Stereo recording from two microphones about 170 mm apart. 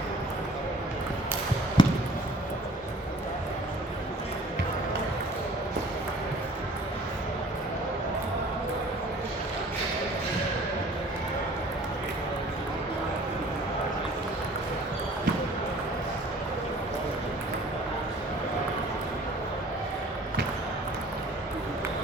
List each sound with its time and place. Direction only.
1.8 s basketball bounce: 25° left (ahead or behind)